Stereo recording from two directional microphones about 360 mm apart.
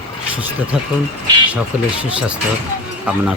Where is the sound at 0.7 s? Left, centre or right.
Centre.